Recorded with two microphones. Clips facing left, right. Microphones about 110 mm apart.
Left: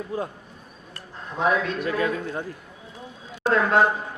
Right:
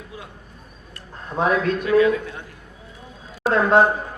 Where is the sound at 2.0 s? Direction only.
40° left (ahead or behind).